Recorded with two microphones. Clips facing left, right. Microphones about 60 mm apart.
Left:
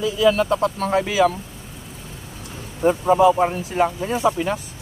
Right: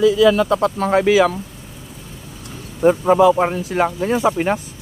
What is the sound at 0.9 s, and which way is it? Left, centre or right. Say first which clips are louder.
Speech: right 5 dB; right.